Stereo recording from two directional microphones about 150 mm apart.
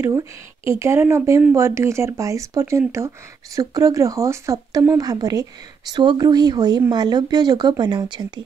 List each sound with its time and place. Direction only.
0.7 s a woman's voice: 15° right (ahead or behind)